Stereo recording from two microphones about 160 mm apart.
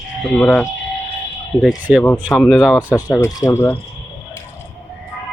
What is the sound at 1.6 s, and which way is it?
Speech, 5° right (ahead or behind).